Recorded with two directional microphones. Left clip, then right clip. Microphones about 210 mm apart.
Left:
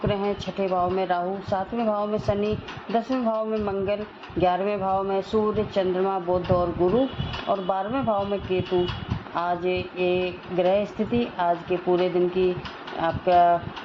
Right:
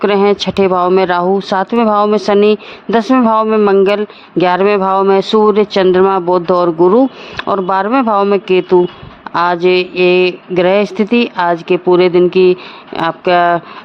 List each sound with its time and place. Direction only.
0.0 s speech: 50° right (ahead or behind)